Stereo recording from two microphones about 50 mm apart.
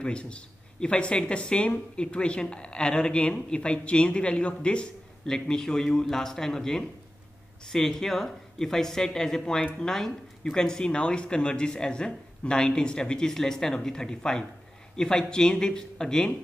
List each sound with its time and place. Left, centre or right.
0.0 s speech: left